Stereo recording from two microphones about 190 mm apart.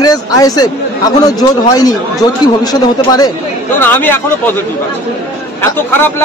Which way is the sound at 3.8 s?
10° left (ahead or behind).